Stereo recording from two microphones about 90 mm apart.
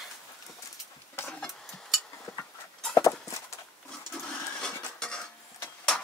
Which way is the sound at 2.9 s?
35° left (ahead or behind).